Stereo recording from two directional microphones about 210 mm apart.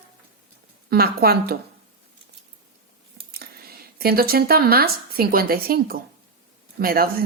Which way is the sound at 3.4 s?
50° right (ahead or behind).